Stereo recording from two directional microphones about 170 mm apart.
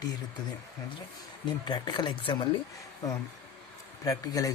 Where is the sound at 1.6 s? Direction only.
25° left (ahead or behind).